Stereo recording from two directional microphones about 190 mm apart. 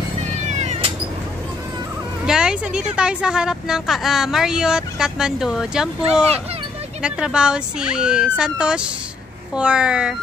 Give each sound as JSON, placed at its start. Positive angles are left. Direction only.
{"t": 0.5, "sound": "cat", "side_deg": -35}
{"t": 2.2, "sound": "speech", "side_deg": -5}